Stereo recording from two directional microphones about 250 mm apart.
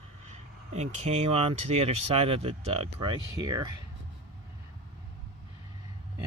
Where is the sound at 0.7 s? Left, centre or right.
Right.